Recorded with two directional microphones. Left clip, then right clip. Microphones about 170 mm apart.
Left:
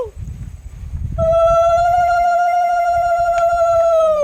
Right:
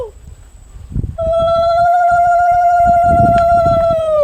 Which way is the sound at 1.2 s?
55° left (ahead or behind).